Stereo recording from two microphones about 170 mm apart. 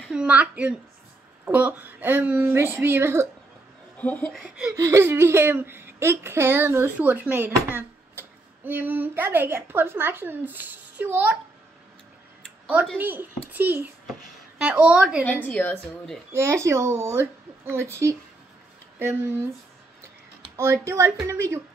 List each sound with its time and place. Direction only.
0.1 s a woman's voice: 5° right (ahead or behind)
4.0 s speech: 10° left (ahead or behind)
4.7 s speech: 15° right (ahead or behind)
12.9 s speech: 10° right (ahead or behind)
15.4 s a woman's voice: 10° left (ahead or behind)
16.3 s speech: 15° right (ahead or behind)
20.5 s speech: 15° right (ahead or behind)